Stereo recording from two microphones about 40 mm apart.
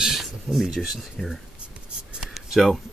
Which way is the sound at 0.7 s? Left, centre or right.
Centre.